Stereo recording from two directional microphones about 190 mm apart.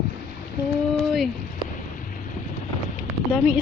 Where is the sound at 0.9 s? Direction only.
Centre (ahead or behind).